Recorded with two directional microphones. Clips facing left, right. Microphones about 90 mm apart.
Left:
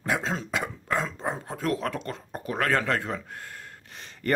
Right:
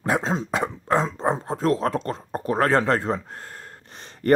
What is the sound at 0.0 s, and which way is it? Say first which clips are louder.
Dog: right 5 dB; 35° right (ahead or behind).